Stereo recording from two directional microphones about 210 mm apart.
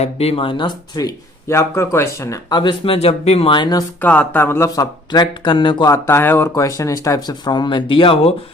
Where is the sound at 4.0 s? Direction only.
10° left (ahead or behind).